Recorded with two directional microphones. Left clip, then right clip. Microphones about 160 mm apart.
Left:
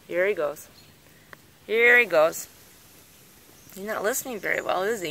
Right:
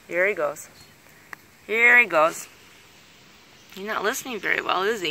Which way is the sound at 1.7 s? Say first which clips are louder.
Right 2 dB; 15° left (ahead or behind).